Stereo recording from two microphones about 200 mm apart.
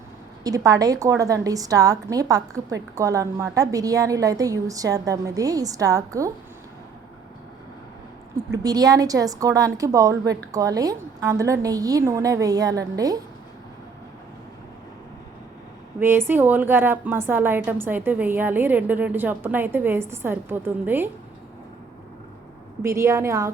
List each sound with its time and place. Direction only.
0.4 s a woman's voice: 15° right (ahead or behind)
8.6 s a woman's voice: 20° right (ahead or behind)
16.0 s a woman's voice: 10° right (ahead or behind)
22.8 s a woman's voice: 15° right (ahead or behind)